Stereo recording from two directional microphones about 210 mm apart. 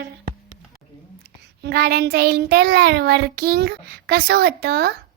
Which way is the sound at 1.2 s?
50° right (ahead or behind).